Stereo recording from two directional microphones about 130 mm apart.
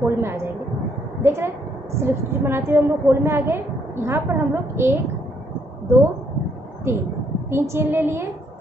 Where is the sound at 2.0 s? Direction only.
20° right (ahead or behind).